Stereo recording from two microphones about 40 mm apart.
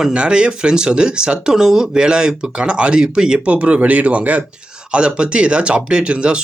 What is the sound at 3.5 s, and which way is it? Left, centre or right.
Speech, right.